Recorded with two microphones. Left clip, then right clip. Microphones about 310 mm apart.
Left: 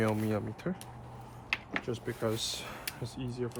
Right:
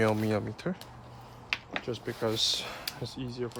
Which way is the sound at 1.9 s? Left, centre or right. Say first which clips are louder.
Right 3 dB; right.